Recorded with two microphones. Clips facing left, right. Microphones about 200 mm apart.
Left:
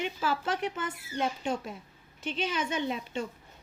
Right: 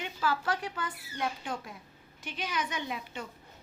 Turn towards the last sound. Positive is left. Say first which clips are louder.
# left 6 dB
turn(degrees=25)  # may be behind; listen again after turning